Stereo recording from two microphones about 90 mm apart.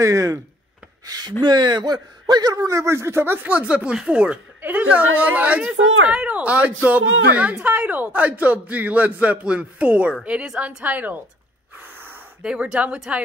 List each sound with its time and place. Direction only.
0.0 s speech: 35° right (ahead or behind); by 2.5 s 55° right (ahead or behind)
2.5 s speech: 35° right (ahead or behind); by 11.1 s 15° right (ahead or behind)
11.8 s gasp: 20° right (ahead or behind)
12.4 s speech: 10° right (ahead or behind)